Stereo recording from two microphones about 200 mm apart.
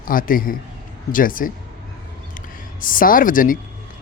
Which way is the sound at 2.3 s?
45° left (ahead or behind).